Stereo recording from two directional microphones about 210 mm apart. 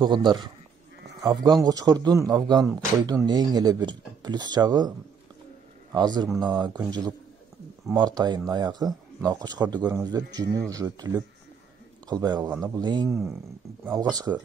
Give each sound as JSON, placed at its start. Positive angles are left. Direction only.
{"t": 0.0, "sound": "a man's voice", "side_deg": -20}
{"t": 5.9, "sound": "a man's voice", "side_deg": -20}